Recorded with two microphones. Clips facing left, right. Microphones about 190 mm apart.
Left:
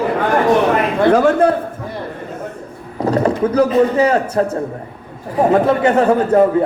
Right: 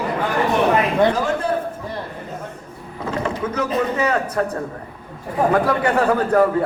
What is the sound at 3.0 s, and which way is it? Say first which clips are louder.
Speech: left 9 dB; 40° left (ahead or behind).